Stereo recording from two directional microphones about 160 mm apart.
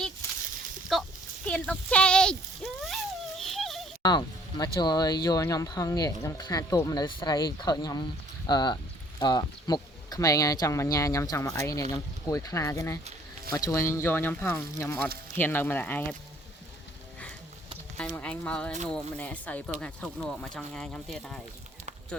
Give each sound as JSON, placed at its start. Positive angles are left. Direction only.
{"t": 0.9, "sound": "a sound", "side_deg": 0}
{"t": 4.0, "sound": "speech", "side_deg": 25}
{"t": 18.1, "sound": "speech", "side_deg": 10}